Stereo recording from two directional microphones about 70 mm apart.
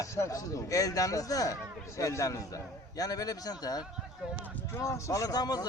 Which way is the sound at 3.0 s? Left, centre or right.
Left.